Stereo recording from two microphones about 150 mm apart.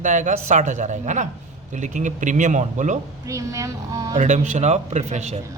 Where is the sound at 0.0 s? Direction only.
55° right (ahead or behind).